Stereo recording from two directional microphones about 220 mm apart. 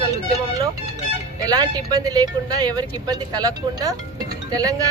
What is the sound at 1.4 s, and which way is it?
Speech, 15° right (ahead or behind).